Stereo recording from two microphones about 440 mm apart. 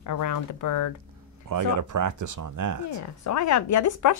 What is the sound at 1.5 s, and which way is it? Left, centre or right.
Speech, right.